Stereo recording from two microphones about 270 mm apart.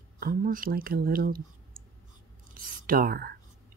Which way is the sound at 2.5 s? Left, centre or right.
Right.